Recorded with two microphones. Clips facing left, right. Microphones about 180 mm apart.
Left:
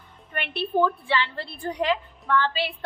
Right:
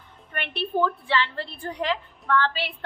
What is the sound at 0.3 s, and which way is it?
A woman's voice, 15° left (ahead or behind).